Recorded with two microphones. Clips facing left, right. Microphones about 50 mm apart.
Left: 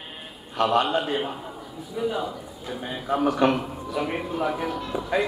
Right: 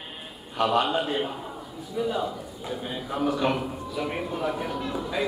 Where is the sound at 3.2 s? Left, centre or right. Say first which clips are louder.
Left 3 dB; left.